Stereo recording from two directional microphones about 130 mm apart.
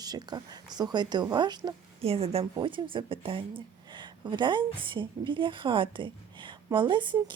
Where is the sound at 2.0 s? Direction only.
50° right (ahead or behind).